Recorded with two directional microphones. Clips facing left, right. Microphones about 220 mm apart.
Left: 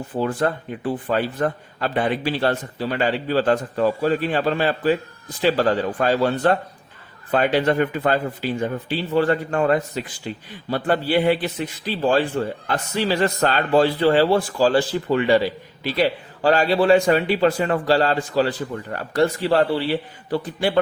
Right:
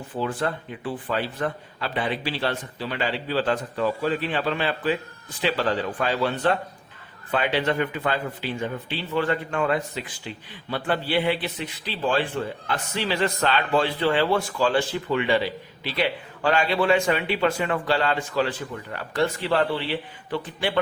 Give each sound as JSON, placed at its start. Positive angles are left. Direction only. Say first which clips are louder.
{"t": 0.2, "sound": "a man's voice", "louder": "left 5 dB", "side_deg": 45}